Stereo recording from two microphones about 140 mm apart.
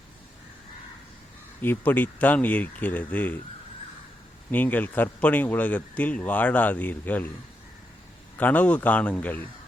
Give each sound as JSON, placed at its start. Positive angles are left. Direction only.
{"t": 1.6, "sound": "a man's voice", "side_deg": 15}
{"t": 4.5, "sound": "a man's voice", "side_deg": 10}
{"t": 8.4, "sound": "a man's voice", "side_deg": 10}